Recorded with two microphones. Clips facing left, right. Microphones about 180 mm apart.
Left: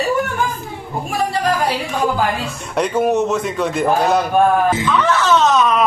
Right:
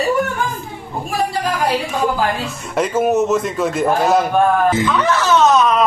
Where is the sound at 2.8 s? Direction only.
Centre (ahead or behind).